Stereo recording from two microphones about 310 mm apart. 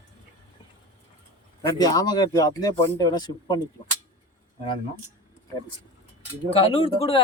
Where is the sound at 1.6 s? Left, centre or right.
Centre.